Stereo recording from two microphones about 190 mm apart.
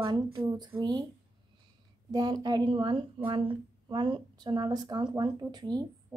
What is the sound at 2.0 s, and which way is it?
A woman's voice, 20° right (ahead or behind).